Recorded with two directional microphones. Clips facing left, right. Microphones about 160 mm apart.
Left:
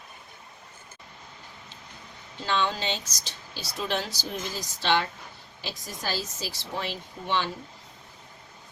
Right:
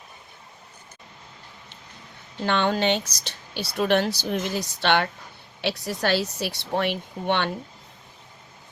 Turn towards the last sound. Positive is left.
turn(degrees=-65)  # may be behind; listen again after turning